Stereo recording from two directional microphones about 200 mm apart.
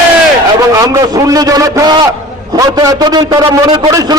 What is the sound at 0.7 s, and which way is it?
A man's voice, 20° right (ahead or behind).